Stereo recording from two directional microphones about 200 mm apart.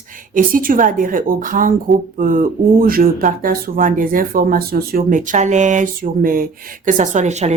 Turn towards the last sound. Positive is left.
turn(degrees=-35)  # may be behind; listen again after turning